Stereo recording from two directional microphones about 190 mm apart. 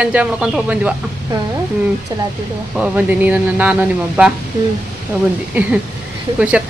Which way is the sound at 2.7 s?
10° right (ahead or behind).